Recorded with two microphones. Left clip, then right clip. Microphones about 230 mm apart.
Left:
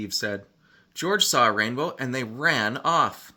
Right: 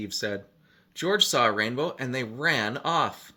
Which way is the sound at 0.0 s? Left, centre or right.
Left.